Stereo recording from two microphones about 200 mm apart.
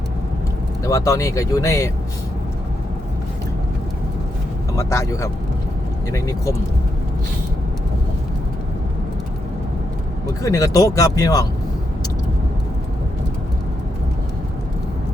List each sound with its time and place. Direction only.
0.9 s speech: 15° left (ahead or behind)
4.8 s speech: 15° left (ahead or behind)
10.4 s speech: 15° left (ahead or behind)